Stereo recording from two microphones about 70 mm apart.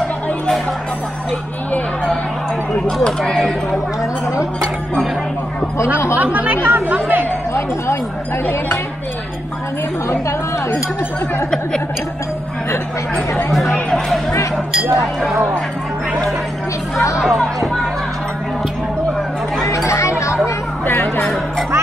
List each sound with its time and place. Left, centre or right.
3.0 s speech: centre
6.1 s speech: right
7.5 s speech: left
13.5 s speech: centre
17.2 s speech: centre
19.9 s a sound: left
20.4 s a sound: left
21.2 s speech: centre